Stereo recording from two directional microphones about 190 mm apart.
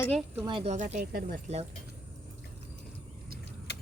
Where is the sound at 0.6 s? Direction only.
35° right (ahead or behind).